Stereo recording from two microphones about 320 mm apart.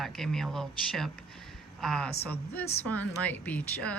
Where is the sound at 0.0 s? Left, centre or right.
Centre.